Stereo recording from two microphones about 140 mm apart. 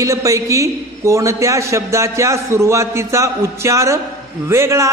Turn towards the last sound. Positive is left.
turn(degrees=-20)  # may be behind; listen again after turning